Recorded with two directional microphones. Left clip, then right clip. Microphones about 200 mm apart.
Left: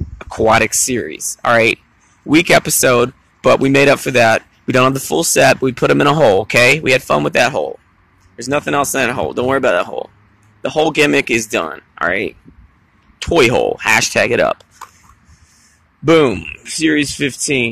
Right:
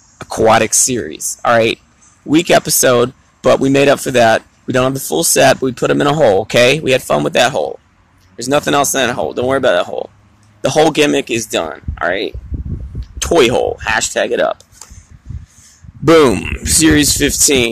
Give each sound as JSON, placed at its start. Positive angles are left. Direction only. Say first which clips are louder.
{"t": 0.5, "sound": "speech", "louder": "right 1 dB", "side_deg": 0}
{"t": 4.6, "sound": "speech", "louder": "left 3 dB", "side_deg": 10}
{"t": 8.5, "sound": "speech", "louder": "right 3 dB", "side_deg": -10}
{"t": 8.8, "sound": "speech", "louder": "right 1 dB", "side_deg": 0}
{"t": 10.6, "sound": "speech", "louder": "right 4 dB", "side_deg": -15}
{"t": 11.0, "sound": "speech", "louder": "left 1 dB", "side_deg": 5}
{"t": 16.0, "sound": "speech", "louder": "right 3 dB", "side_deg": -20}